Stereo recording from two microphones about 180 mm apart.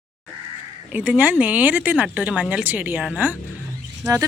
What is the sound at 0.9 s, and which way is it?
Speech, 5° right (ahead or behind).